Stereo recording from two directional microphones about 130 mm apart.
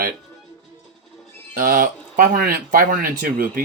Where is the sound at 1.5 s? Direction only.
90° right.